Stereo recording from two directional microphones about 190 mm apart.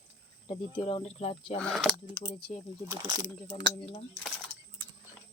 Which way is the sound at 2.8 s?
15° right (ahead or behind).